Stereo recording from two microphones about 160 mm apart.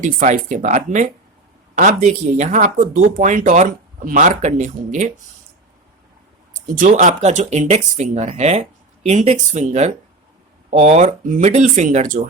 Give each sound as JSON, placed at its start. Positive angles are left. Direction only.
{"t": 0.0, "sound": "speech", "side_deg": -50}
{"t": 6.7, "sound": "speech", "side_deg": -50}